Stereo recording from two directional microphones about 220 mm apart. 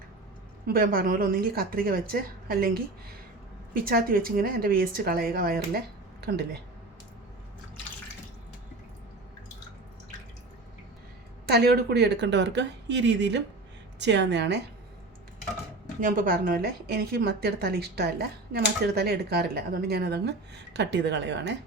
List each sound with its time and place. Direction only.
0.7 s a woman's voice: 40° right (ahead or behind)
3.8 s a woman's voice: 40° right (ahead or behind)
11.4 s a woman's voice: 45° right (ahead or behind)
16.0 s a woman's voice: 40° right (ahead or behind)